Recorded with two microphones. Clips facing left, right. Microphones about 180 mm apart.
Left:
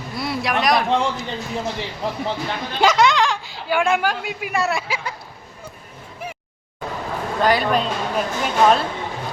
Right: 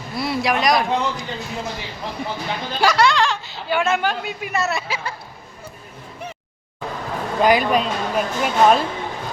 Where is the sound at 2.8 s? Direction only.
20° left (ahead or behind).